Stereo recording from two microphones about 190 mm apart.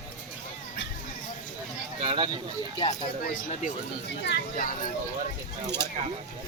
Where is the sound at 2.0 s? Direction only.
30° right (ahead or behind).